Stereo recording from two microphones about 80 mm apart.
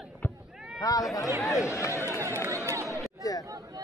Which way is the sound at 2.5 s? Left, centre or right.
Right.